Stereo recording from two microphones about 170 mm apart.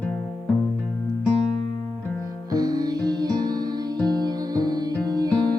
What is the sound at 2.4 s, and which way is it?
Music, 20° right (ahead or behind).